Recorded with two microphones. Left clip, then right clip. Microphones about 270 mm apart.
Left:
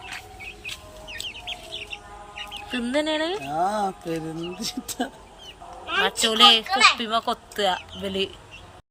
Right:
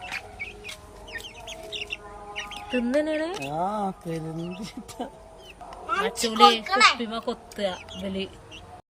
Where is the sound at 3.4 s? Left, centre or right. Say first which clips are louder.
Left 4 dB; right.